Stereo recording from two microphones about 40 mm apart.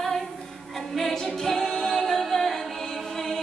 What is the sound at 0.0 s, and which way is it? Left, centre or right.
Female singing, centre.